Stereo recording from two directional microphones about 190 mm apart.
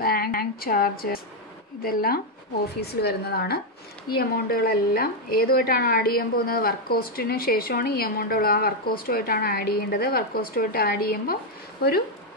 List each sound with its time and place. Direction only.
0.0 s a woman's voice: 50° left (ahead or behind)